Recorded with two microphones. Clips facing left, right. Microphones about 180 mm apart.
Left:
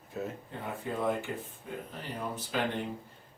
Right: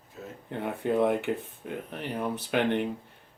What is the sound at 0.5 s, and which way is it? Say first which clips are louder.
Speech: right 11 dB; 65° right (ahead or behind).